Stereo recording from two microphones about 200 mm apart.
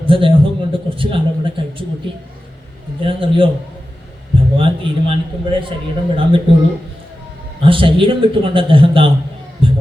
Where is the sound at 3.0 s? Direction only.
25° right (ahead or behind).